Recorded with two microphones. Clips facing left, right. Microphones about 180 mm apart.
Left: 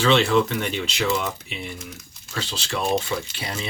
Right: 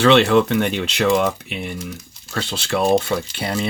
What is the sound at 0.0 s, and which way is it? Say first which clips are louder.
Speech: right 5 dB; 60° right (ahead or behind).